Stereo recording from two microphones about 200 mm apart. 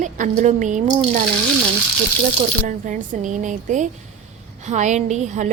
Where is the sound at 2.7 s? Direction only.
40° right (ahead or behind).